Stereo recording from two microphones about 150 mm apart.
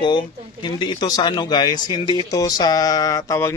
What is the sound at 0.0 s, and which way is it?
A man's voice, 30° left (ahead or behind).